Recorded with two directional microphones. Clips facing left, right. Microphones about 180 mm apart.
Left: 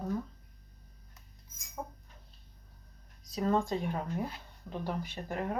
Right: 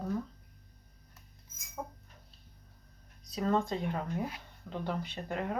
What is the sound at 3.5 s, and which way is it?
Speech, 15° left (ahead or behind).